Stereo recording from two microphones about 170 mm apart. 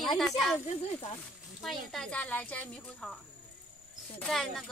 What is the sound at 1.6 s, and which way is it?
Speech, centre (ahead or behind).